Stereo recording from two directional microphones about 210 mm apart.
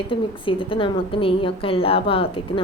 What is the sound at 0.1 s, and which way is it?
A woman's voice, 25° left (ahead or behind).